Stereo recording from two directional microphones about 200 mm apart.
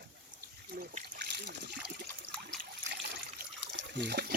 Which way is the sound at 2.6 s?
55° right (ahead or behind).